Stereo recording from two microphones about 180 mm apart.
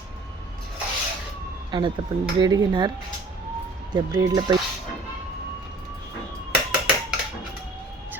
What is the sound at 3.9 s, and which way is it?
Speech, 20° right (ahead or behind).